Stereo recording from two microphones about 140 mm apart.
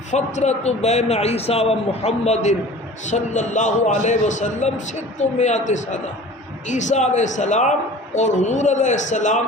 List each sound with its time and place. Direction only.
0.1 s a man's voice: 55° left (ahead or behind)